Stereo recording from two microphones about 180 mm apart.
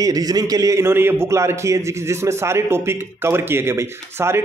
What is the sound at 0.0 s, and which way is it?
Speech, 20° right (ahead or behind).